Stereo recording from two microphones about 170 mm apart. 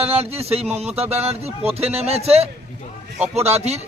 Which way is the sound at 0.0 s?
35° right (ahead or behind).